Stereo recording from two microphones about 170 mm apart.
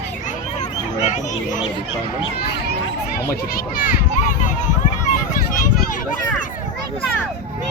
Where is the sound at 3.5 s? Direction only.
55° left (ahead or behind).